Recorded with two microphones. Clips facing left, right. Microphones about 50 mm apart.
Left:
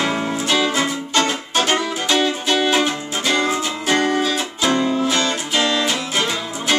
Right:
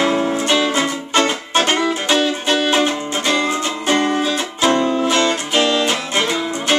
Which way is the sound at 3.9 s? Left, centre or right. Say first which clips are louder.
Right 1 dB; right.